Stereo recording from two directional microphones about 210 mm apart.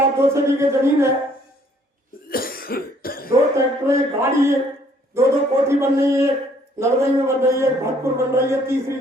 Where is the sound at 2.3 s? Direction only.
45° left (ahead or behind).